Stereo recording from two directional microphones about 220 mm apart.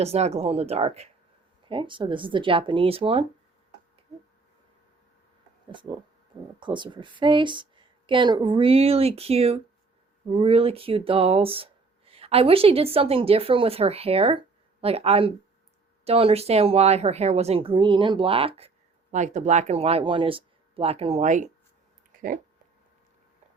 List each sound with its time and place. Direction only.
0.0 s speech: 30° right (ahead or behind)
5.7 s speech: 20° right (ahead or behind)
22.1 s a sound: 40° right (ahead or behind)